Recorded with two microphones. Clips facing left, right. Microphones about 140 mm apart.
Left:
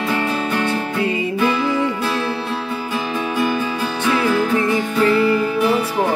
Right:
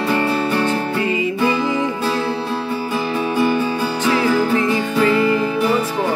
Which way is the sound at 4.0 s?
10° right (ahead or behind).